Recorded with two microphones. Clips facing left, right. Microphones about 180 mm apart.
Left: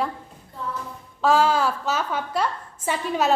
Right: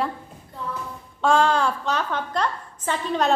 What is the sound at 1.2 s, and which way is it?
A woman's voice, 5° left (ahead or behind).